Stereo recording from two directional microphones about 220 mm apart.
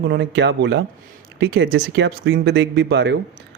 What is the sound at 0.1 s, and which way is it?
Speech, 50° right (ahead or behind).